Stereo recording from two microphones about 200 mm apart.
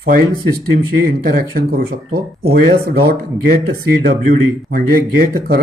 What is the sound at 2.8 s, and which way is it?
Speech, 50° right (ahead or behind).